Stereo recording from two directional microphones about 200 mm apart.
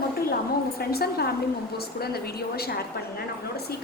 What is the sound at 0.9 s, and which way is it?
A woman's voice, 50° left (ahead or behind).